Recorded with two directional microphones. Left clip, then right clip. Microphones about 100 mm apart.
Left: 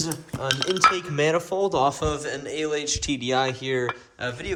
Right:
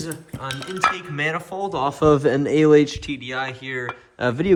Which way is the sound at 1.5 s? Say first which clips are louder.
Left 2 dB; 10° left (ahead or behind).